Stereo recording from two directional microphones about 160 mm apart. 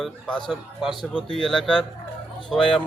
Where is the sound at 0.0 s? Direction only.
Centre (ahead or behind).